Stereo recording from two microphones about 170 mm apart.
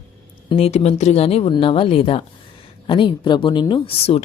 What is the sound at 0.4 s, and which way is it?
Speech, 35° left (ahead or behind).